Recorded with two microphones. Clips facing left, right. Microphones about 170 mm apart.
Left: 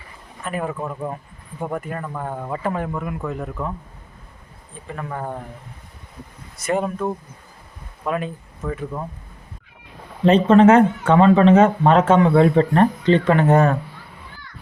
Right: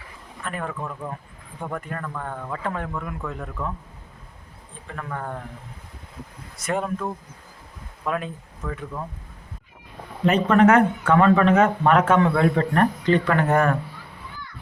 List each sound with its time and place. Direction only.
0.4 s speech: 10° left (ahead or behind)
4.9 s speech: 10° left (ahead or behind)
6.6 s speech: centre (ahead or behind)
10.2 s speech: 30° left (ahead or behind)